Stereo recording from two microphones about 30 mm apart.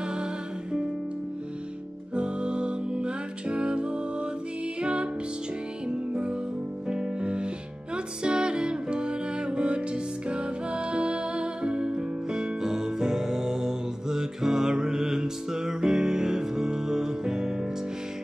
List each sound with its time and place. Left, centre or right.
0.0 s music: right
2.1 s music: right
6.9 s music: right